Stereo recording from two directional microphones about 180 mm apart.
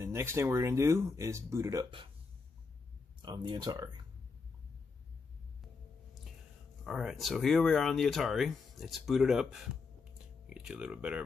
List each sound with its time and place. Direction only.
0.0 s speech: 15° right (ahead or behind)
3.2 s speech: 25° right (ahead or behind)
6.8 s speech: centre (ahead or behind)